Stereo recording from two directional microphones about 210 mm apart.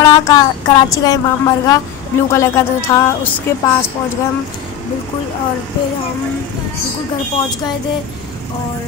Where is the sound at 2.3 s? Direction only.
15° left (ahead or behind).